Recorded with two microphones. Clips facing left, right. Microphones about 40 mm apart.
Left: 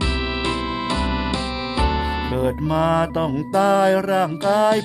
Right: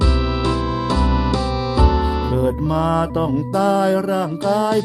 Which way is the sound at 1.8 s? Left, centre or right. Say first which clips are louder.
Right 3 dB; centre.